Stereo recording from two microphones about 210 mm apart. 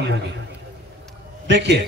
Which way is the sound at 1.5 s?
55° right (ahead or behind).